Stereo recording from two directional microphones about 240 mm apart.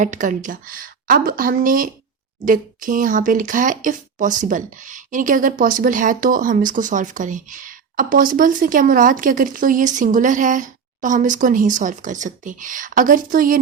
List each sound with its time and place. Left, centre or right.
0.0 s speech: right